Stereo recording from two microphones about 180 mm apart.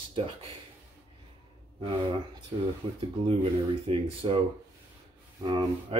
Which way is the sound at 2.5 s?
25° right (ahead or behind).